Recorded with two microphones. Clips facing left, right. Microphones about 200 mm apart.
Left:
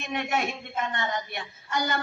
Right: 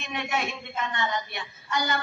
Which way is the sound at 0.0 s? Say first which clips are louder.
Left 2 dB; 50° left (ahead or behind).